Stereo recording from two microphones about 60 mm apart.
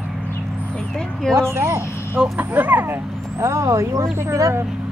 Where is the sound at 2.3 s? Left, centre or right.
Right.